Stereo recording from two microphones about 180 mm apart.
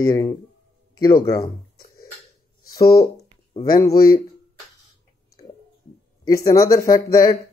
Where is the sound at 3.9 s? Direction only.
55° left (ahead or behind).